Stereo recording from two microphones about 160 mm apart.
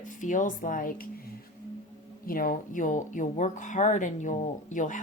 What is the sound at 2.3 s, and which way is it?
Speech, 60° left (ahead or behind).